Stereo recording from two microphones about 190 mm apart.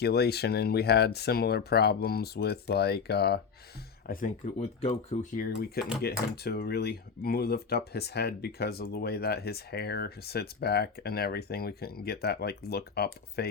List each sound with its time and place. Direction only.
0.0 s speech: 60° left (ahead or behind)
4.0 s speech: 50° left (ahead or behind)
4.5 s speech: 35° left (ahead or behind)
5.4 s speech: 55° left (ahead or behind)